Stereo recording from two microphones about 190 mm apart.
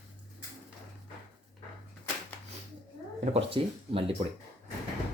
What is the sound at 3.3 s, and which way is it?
Speech, 30° right (ahead or behind).